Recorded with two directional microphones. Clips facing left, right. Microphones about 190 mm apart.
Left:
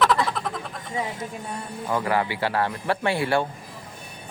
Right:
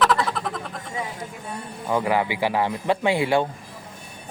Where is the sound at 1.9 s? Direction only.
15° right (ahead or behind).